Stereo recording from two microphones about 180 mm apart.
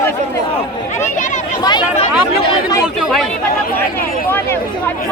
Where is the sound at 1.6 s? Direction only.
25° left (ahead or behind).